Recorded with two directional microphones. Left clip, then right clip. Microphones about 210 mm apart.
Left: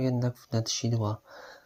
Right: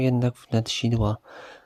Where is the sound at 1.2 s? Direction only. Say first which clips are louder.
Right 4 dB; 30° right (ahead or behind).